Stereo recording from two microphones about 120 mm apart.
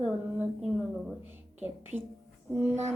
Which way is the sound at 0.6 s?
5° right (ahead or behind).